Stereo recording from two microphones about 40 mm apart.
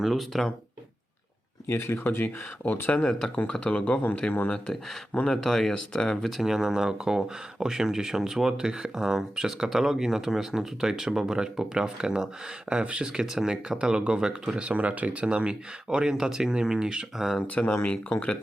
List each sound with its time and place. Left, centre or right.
0.0 s speech: centre
1.7 s speech: left
3.1 s speech: centre
3.5 s speech: left
5.3 s speech: centre
6.3 s speech: centre
12.7 s speech: right
13.3 s speech: centre
14.7 s speech: right; by 17.1 s centre
17.4 s speech: left